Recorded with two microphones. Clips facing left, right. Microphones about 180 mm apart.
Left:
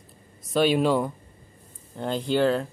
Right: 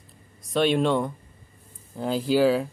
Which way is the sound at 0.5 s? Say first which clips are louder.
Left 1 dB; 5° left (ahead or behind).